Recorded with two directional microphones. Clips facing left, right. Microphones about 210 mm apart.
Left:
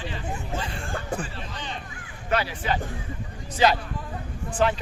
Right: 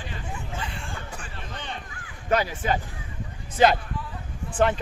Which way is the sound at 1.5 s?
55° right (ahead or behind).